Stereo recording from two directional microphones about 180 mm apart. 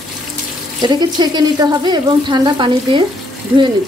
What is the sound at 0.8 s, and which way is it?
Speech, 25° right (ahead or behind).